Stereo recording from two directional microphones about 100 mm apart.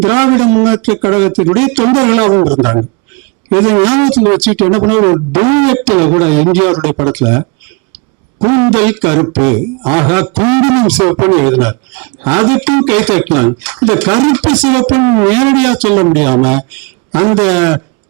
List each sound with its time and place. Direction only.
0.0 s speech: 20° right (ahead or behind)
15.0 s speech: 30° right (ahead or behind)
15.3 s speech: 15° right (ahead or behind)